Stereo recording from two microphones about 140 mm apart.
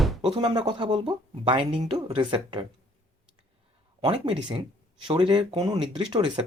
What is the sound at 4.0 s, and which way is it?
Speech, 40° right (ahead or behind).